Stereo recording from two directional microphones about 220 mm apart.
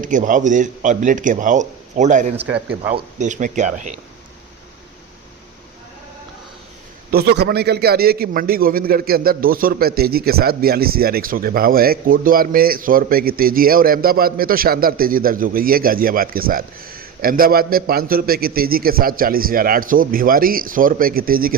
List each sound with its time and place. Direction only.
0.0 s a man's voice: 35° right (ahead or behind)
2.3 s speech: 5° right (ahead or behind)
2.9 s a man's voice: 35° right (ahead or behind)
7.1 s a man's voice: 45° right (ahead or behind)